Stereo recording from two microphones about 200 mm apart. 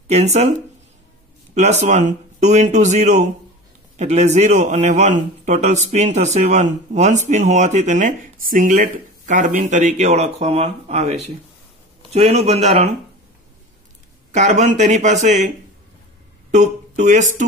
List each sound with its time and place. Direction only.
0.1 s a man's voice: 35° right (ahead or behind)
1.5 s a man's voice: 35° right (ahead or behind)
14.3 s a man's voice: 35° right (ahead or behind)
16.5 s speech: 35° right (ahead or behind)